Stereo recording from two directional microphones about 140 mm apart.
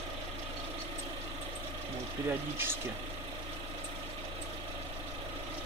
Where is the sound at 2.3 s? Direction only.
15° right (ahead or behind).